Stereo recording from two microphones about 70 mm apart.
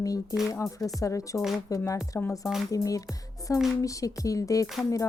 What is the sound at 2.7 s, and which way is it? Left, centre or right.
Speech, left.